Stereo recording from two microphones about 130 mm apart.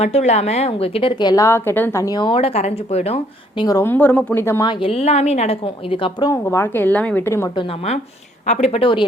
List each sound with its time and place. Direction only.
0.0 s a woman's voice: 55° left (ahead or behind)
1.2 s a woman's voice: 30° left (ahead or behind)
1.5 s a woman's voice: 20° left (ahead or behind); by 3.2 s 55° left (ahead or behind)
3.6 s a woman's voice: 30° left (ahead or behind)
3.8 s a woman's voice: 15° left (ahead or behind)
4.6 s a woman's voice: 40° left (ahead or behind)
6.3 s a woman's voice: 20° left (ahead or behind)
8.4 s a woman's voice: 60° left (ahead or behind); by 9.0 s 40° left (ahead or behind)